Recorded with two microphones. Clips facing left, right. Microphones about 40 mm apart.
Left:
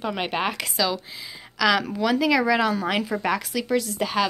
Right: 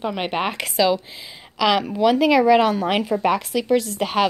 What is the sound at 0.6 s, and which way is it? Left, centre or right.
A woman's voice, right.